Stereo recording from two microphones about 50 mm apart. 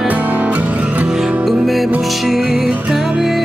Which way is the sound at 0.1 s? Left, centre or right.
Right.